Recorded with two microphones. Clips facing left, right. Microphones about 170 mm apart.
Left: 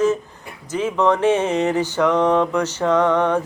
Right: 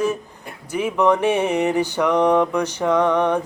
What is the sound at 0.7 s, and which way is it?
Speech, 15° right (ahead or behind).